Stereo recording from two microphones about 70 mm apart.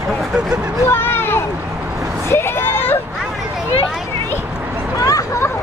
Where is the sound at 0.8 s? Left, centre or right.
Left.